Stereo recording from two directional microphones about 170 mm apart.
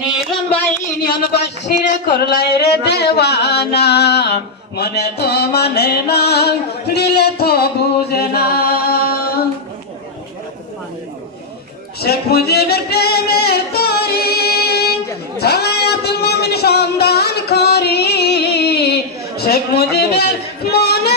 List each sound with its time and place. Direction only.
1.1 s singing: 65° left (ahead or behind)
12.0 s music: 70° left (ahead or behind)